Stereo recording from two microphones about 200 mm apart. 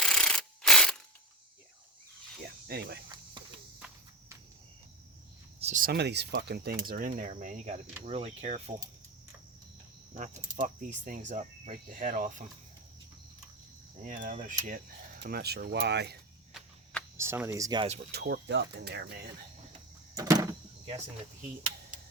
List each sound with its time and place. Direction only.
0.0 s ratchet: 5° left (ahead or behind)
2.6 s speech: 50° right (ahead or behind)
3.4 s insect: 20° right (ahead or behind)
5.5 s a sound: 30° right (ahead or behind)
5.8 s speech: 55° right (ahead or behind); by 8.7 s 30° right (ahead or behind)
10.6 s speech: 40° right (ahead or behind)
14.0 s speech: 40° right (ahead or behind)
15.2 s speech: 55° right (ahead or behind)
17.2 s speech: 10° right (ahead or behind)
18.1 s speech: 55° right (ahead or behind)
20.1 s door: 15° right (ahead or behind)